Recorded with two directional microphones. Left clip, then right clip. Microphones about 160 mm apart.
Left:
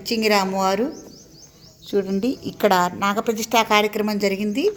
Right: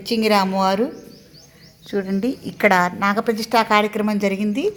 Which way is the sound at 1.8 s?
10° left (ahead or behind).